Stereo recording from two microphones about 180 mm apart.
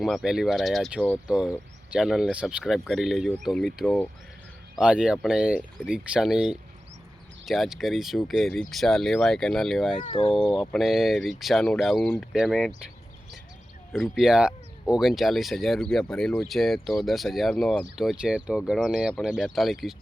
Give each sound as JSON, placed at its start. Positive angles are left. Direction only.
{"t": 0.0, "sound": "speech", "side_deg": 0}
{"t": 10.1, "sound": "speech", "side_deg": 30}
{"t": 10.5, "sound": "speech", "side_deg": 0}
{"t": 13.9, "sound": "speech", "side_deg": -5}